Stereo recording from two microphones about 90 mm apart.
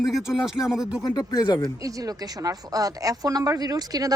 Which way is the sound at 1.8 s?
40° right (ahead or behind).